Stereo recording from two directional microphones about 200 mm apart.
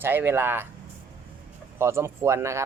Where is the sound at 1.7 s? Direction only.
10° right (ahead or behind).